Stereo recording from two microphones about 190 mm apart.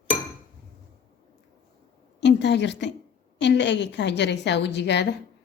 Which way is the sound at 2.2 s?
65° left (ahead or behind).